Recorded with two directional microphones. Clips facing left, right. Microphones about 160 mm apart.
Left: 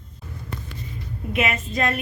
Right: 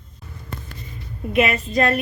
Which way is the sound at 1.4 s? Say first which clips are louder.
Right 5 dB; 40° right (ahead or behind).